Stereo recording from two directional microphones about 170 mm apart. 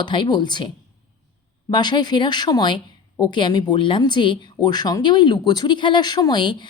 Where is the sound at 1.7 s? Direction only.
25° left (ahead or behind).